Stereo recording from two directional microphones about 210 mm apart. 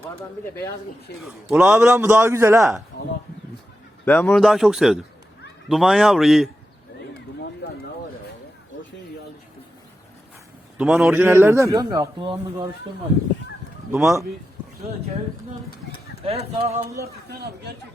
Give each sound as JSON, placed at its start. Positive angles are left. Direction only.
{"t": 1.5, "sound": "a man's voice", "side_deg": -5}
{"t": 4.0, "sound": "speech", "side_deg": 10}
{"t": 10.8, "sound": "a man's voice", "side_deg": 0}
{"t": 13.9, "sound": "speech", "side_deg": -5}
{"t": 16.2, "sound": "speech", "side_deg": -30}
{"t": 17.0, "sound": "speech", "side_deg": -50}